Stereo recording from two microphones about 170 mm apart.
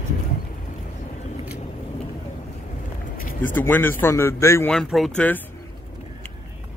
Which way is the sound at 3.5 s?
10° left (ahead or behind).